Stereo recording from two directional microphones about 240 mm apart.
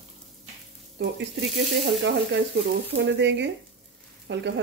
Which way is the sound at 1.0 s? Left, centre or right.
Right.